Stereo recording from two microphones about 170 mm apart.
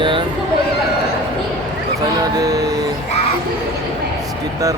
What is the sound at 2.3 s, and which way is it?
Music, 20° right (ahead or behind).